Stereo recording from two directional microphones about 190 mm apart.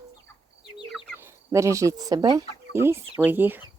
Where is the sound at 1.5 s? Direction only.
15° right (ahead or behind).